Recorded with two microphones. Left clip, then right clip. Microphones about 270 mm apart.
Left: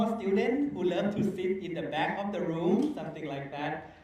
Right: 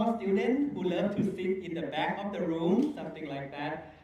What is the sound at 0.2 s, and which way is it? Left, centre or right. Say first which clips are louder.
A man's voice: even; left.